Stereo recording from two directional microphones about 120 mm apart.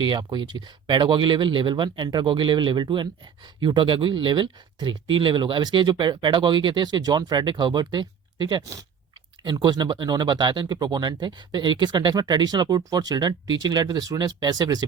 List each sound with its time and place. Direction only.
0.0 s speech: 40° right (ahead or behind)